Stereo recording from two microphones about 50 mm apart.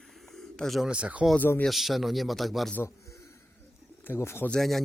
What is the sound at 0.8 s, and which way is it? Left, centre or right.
Speech, right.